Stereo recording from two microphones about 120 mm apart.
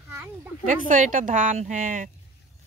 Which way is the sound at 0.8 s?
90° right.